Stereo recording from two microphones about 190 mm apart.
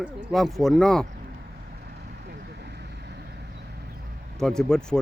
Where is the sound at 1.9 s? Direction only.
55° right (ahead or behind).